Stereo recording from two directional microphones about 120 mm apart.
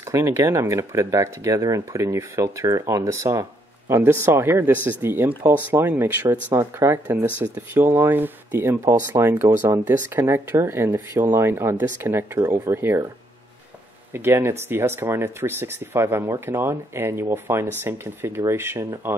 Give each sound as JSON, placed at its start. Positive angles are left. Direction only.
{"t": 0.0, "sound": "speech", "side_deg": -25}
{"t": 14.1, "sound": "speech", "side_deg": -20}